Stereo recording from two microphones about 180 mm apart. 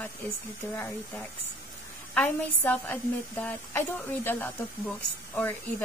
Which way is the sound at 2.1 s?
10° left (ahead or behind).